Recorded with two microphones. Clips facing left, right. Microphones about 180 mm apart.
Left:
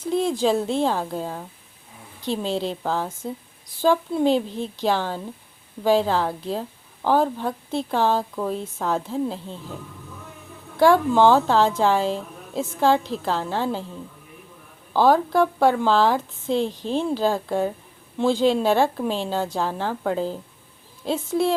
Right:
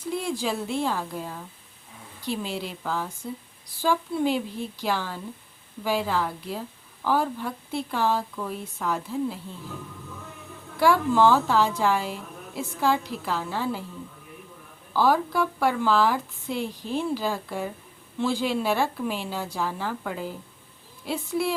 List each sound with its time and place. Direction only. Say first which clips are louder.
0.0 s a woman's voice: left 7 dB; 25° left (ahead or behind)
10.8 s a woman's voice: left 4 dB; 25° left (ahead or behind)
14.9 s a woman's voice: left 5 dB; 25° left (ahead or behind)